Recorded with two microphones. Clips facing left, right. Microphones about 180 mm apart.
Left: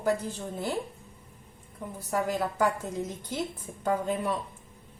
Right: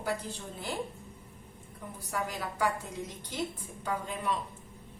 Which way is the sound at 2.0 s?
45° left (ahead or behind).